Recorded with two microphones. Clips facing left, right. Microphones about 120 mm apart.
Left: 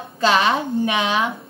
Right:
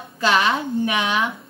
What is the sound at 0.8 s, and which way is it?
Child singing, 25° left (ahead or behind).